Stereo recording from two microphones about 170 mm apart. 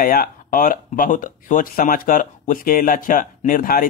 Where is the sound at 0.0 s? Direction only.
55° left (ahead or behind).